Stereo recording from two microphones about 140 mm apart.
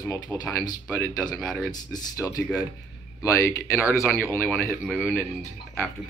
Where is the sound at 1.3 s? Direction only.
Centre (ahead or behind).